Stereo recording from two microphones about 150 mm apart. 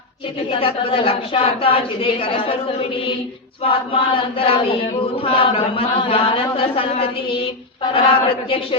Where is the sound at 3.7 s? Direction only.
35° left (ahead or behind).